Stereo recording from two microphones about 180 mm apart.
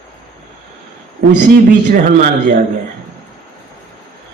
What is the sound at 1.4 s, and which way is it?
A man's voice, 45° right (ahead or behind).